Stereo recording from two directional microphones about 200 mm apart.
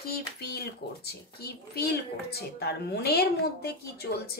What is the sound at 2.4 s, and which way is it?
Speech, 50° left (ahead or behind).